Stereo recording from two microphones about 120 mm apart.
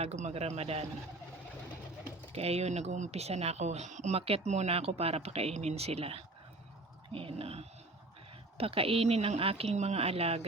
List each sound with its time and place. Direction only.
0.0 s speech: 65° right (ahead or behind)
2.3 s speech: 60° right (ahead or behind)